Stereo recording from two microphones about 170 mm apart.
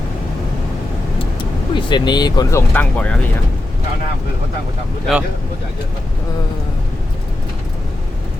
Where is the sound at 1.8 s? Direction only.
25° left (ahead or behind); by 3.2 s 10° left (ahead or behind).